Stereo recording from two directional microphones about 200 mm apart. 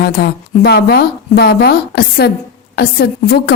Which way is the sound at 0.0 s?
50° left (ahead or behind).